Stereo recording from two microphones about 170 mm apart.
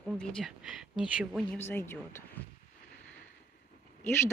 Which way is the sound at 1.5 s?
15° left (ahead or behind).